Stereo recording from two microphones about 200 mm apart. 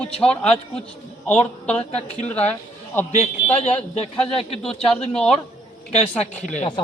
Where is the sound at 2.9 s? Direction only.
10° left (ahead or behind).